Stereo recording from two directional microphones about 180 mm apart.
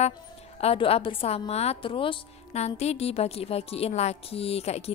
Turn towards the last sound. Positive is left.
turn(degrees=35)  # may be behind; listen again after turning